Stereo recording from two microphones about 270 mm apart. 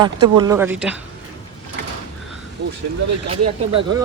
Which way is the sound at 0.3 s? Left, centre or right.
Centre.